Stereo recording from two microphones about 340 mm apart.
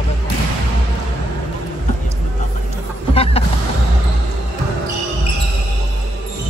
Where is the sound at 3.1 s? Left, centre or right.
Centre.